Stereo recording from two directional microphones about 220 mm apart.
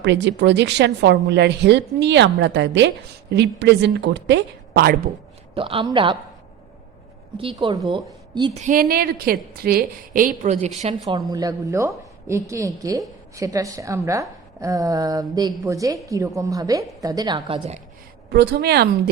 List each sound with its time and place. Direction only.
0.0 s a woman's voice: 50° right (ahead or behind)
5.5 s speech: 25° right (ahead or behind)
7.3 s a woman's voice: 25° right (ahead or behind)
8.6 s a woman's voice: 40° right (ahead or behind)
11.0 s a woman's voice: 20° right (ahead or behind)
18.3 s a woman's voice: 50° right (ahead or behind)